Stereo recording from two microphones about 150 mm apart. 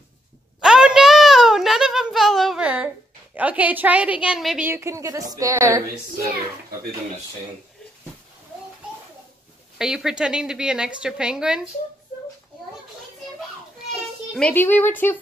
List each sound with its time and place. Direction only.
0.6 s a sound: 5° right (ahead or behind)
3.3 s a woman's voice: 10° right (ahead or behind)
4.6 s a woman's voice: 20° right (ahead or behind)
9.8 s a woman's voice: 5° right (ahead or behind)
14.3 s speech: 10° left (ahead or behind)